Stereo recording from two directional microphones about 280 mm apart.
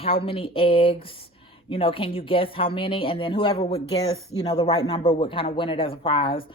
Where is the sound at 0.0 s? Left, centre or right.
Centre.